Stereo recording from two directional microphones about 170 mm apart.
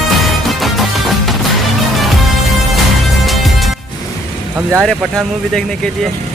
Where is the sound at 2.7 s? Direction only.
Centre (ahead or behind).